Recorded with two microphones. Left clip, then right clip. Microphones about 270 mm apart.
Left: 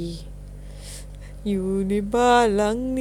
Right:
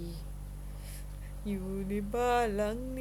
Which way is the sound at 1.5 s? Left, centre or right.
Left.